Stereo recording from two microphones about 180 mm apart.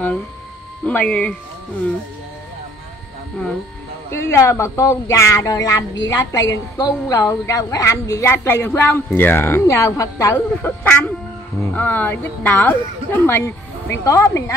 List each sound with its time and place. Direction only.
0.8 s a woman's voice: 5° left (ahead or behind)
4.1 s a woman's voice: 15° left (ahead or behind)